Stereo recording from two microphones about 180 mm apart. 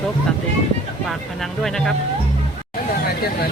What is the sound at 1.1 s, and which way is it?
Speech, centre (ahead or behind).